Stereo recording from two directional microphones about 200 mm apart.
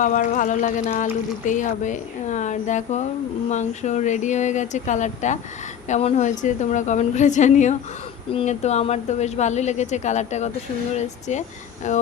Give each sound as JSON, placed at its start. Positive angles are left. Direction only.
{"t": 0.0, "sound": "a woman's voice", "side_deg": 40}